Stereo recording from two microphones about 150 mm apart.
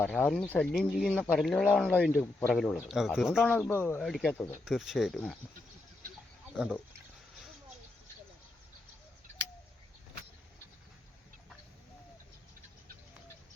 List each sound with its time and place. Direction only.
0.0 s speech: 5° left (ahead or behind)
3.7 s speech: 15° left (ahead or behind)
4.0 s speech: 5° left (ahead or behind)
6.5 s speech: 5° right (ahead or behind)